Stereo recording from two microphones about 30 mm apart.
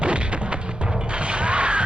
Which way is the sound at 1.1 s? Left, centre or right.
Right.